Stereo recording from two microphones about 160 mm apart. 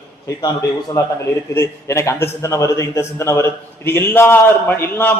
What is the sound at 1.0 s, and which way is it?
A man's voice, 20° left (ahead or behind).